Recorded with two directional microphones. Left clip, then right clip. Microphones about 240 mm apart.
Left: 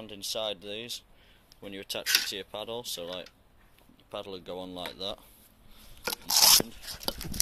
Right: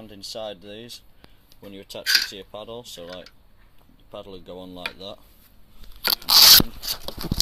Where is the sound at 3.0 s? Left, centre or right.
Left.